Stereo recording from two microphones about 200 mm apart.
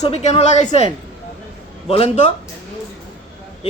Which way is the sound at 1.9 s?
30° left (ahead or behind).